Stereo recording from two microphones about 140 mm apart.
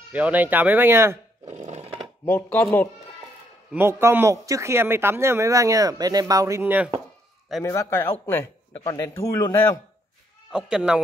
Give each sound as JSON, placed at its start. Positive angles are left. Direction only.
{"t": 0.1, "sound": "speech", "side_deg": -10}
{"t": 1.5, "sound": "chainsaw", "side_deg": -55}
{"t": 2.2, "sound": "speech", "side_deg": 15}
{"t": 3.7, "sound": "speech", "side_deg": -15}
{"t": 7.6, "sound": "speech", "side_deg": 20}
{"t": 10.5, "sound": "speech", "side_deg": -5}